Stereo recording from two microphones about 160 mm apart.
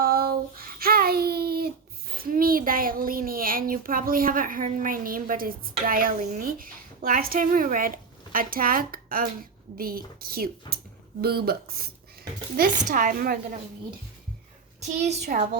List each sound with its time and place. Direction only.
0.0 s child singing: 70° right (ahead or behind)
2.3 s a child's voice: 65° right (ahead or behind)
12.9 s speech: 55° right (ahead or behind)
15.3 s speech: 60° right (ahead or behind)